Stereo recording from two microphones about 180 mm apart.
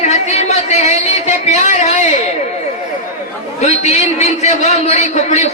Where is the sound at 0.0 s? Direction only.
40° left (ahead or behind).